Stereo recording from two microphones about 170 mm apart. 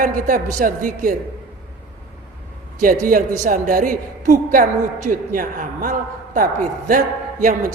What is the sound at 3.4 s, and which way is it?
A man's voice, 55° right (ahead or behind).